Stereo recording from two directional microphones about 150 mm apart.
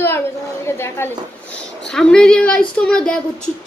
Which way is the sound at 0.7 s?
15° left (ahead or behind).